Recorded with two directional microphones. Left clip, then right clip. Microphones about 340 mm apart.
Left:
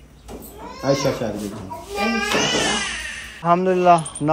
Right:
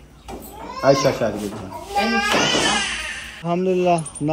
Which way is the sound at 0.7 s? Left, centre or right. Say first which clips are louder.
Right 4 dB; centre.